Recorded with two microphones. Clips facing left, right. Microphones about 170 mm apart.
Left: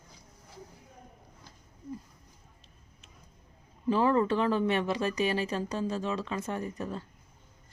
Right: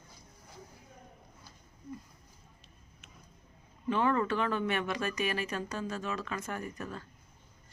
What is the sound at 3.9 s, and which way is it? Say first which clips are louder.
Speech: left 4 dB; 35° left (ahead or behind).